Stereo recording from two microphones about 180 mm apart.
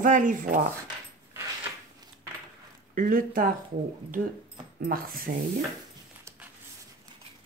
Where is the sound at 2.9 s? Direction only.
50° right (ahead or behind).